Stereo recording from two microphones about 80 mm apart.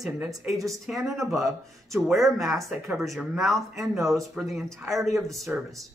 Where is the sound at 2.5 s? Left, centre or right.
Centre.